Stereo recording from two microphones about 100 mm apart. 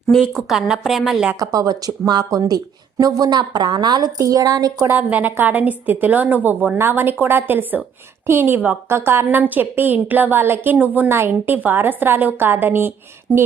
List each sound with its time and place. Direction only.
0.1 s speech: centre (ahead or behind)
1.4 s a woman's voice: 40° right (ahead or behind)
4.9 s a woman's voice: 15° right (ahead or behind)